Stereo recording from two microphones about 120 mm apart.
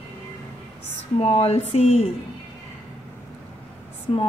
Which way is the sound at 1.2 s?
55° left (ahead or behind).